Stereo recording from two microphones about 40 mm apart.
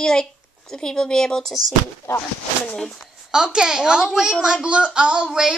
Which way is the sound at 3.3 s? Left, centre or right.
Right.